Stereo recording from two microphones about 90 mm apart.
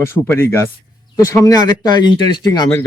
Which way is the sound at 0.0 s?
25° left (ahead or behind).